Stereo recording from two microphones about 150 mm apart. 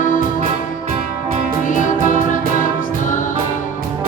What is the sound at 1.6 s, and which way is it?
Music, 60° left (ahead or behind).